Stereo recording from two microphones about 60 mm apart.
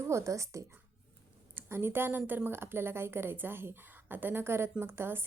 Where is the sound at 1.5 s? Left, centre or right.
Right.